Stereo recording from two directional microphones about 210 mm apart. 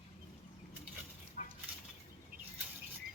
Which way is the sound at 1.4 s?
40° left (ahead or behind).